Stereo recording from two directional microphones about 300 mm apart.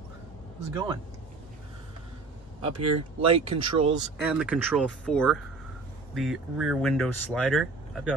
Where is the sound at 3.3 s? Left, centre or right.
Centre.